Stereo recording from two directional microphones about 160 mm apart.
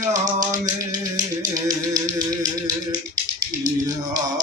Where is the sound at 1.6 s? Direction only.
25° right (ahead or behind).